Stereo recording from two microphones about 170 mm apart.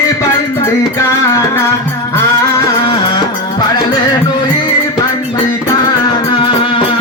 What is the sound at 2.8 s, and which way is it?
Music, 25° left (ahead or behind).